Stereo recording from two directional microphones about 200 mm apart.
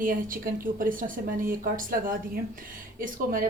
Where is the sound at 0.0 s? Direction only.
45° right (ahead or behind).